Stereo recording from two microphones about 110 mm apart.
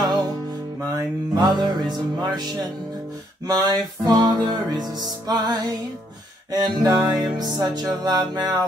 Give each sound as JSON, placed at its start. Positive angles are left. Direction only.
{"t": 0.7, "sound": "music", "side_deg": -35}